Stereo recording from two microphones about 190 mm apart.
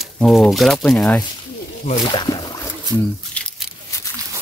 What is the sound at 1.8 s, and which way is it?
Speech, 25° left (ahead or behind).